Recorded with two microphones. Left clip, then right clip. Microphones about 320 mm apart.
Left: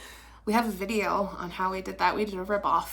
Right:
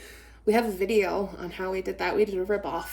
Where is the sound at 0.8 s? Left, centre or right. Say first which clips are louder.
Right 3 dB; centre.